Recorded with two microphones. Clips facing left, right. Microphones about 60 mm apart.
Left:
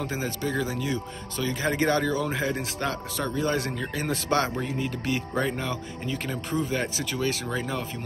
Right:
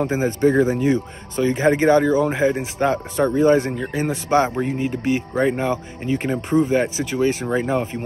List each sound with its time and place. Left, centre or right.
0.0 s speech: right
0.4 s speech: right